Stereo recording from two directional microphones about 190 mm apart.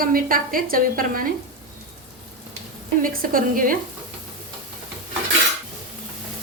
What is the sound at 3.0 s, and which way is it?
Speech, 50° right (ahead or behind).